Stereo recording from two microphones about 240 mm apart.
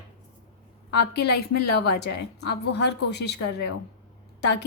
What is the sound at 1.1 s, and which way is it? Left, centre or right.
Speech, left.